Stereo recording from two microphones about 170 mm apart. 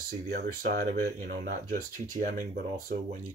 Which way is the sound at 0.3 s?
65° right (ahead or behind).